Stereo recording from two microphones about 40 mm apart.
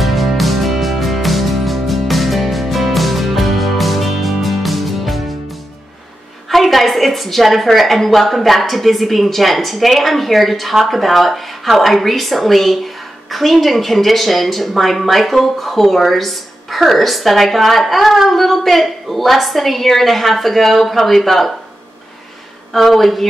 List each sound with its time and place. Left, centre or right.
0.0 s music: centre
6.5 s a woman's voice: centre
22.7 s a woman's voice: centre